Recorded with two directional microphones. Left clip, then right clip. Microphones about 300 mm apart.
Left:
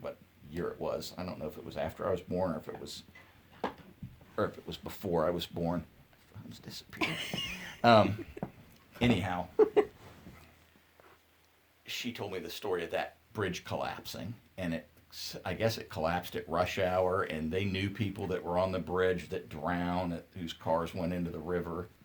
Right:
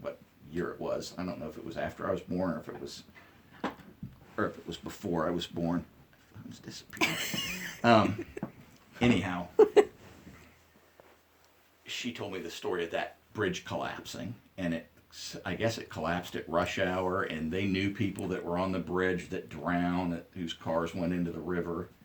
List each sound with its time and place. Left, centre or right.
0.5 s speech: left
4.4 s speech: left
7.0 s speech: centre
7.8 s speech: left
8.4 s a sound: centre
9.0 s speech: left
11.9 s speech: left